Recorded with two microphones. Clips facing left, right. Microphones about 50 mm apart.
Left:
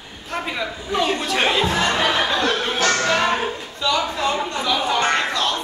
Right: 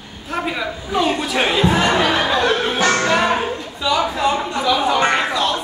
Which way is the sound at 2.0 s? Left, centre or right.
Centre.